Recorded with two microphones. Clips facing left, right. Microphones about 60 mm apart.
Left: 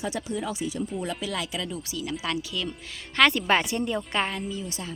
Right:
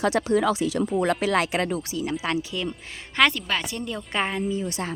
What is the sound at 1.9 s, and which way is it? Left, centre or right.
Speech, right.